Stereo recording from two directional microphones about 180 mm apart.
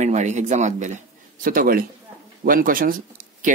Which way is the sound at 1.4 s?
50° right (ahead or behind).